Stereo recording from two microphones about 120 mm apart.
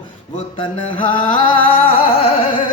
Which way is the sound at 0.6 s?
45° left (ahead or behind).